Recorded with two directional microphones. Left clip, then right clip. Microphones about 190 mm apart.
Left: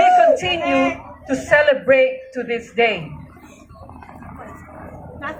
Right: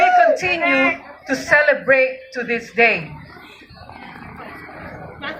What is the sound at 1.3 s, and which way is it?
A woman's voice, 30° left (ahead or behind).